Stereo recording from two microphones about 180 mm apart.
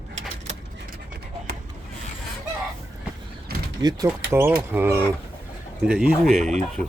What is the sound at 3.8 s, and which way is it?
Speech, 20° right (ahead or behind).